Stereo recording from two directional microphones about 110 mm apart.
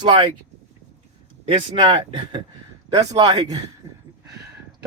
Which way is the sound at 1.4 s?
45° right (ahead or behind).